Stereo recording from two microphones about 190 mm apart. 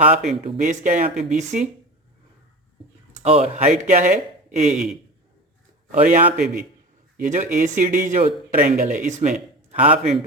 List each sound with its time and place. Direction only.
0.4 s speech: 40° right (ahead or behind)
3.2 s speech: 35° right (ahead or behind)
5.9 s a man's voice: 45° right (ahead or behind)
6.2 s a man's voice: 5° right (ahead or behind)
7.2 s a man's voice: 40° right (ahead or behind)